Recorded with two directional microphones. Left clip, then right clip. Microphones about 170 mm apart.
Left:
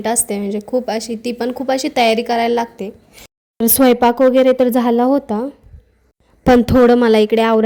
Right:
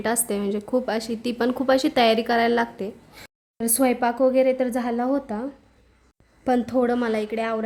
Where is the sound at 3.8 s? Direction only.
45° left (ahead or behind).